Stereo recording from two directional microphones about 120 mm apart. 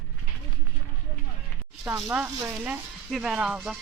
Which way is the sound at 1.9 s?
5° right (ahead or behind).